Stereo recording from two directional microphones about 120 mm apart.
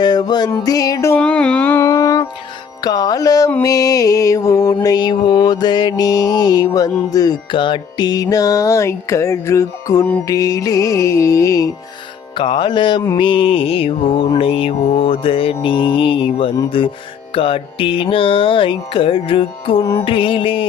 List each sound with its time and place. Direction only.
0.0 s music: 35° left (ahead or behind)
1.2 s speech: 10° left (ahead or behind)
1.8 s music: 30° left (ahead or behind)
12.3 s music: 45° left (ahead or behind)